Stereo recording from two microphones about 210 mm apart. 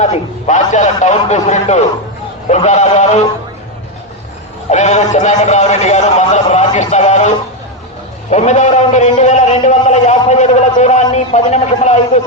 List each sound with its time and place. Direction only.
0.0 s a man's voice: 35° left (ahead or behind)
4.7 s a man's voice: 35° left (ahead or behind)